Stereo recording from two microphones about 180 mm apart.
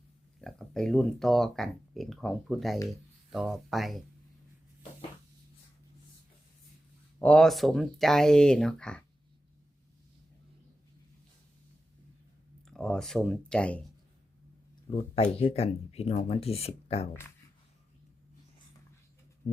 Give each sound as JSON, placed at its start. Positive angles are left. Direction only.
{"t": 0.4, "sound": "speech", "side_deg": 5}
{"t": 7.2, "sound": "speech", "side_deg": 5}
{"t": 12.6, "sound": "speech", "side_deg": 5}
{"t": 14.8, "sound": "speech", "side_deg": 35}